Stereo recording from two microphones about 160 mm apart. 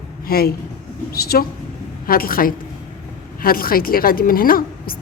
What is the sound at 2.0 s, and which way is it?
A woman's voice, 65° left (ahead or behind).